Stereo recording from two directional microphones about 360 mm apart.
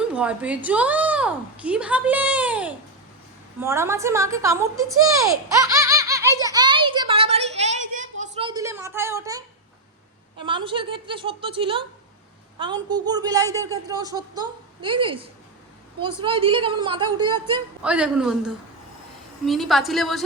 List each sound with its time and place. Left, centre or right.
0.1 s a woman's voice: centre
5.6 s giggle: centre
7.9 s a sound: centre
10.4 s a woman's voice: centre